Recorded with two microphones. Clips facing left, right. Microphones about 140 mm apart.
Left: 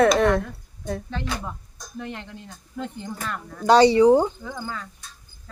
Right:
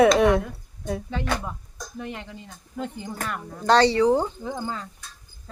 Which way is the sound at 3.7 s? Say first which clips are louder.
Left 4 dB; 15° left (ahead or behind).